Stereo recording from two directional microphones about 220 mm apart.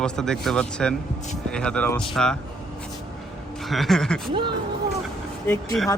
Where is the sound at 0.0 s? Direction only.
5° left (ahead or behind).